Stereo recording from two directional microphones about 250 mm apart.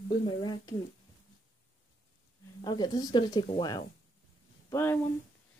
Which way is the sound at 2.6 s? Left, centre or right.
Centre.